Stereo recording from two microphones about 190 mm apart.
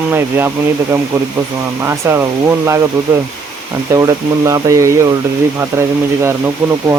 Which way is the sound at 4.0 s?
20° right (ahead or behind).